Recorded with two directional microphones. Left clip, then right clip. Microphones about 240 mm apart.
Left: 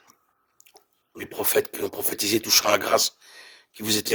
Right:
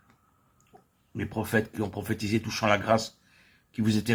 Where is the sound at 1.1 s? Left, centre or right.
Left.